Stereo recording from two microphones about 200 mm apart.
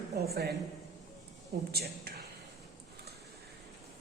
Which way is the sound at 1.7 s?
50° right (ahead or behind).